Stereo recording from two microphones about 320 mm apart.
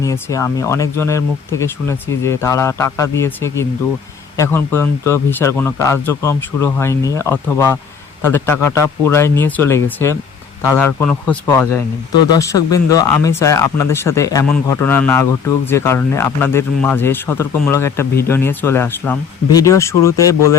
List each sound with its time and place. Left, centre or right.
0.0 s speech: centre